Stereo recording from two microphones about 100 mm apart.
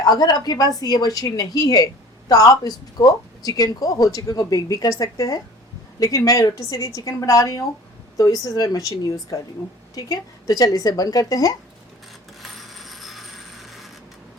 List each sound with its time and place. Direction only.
0.0 s speech: 40° left (ahead or behind)
12.4 s mechanisms: centre (ahead or behind)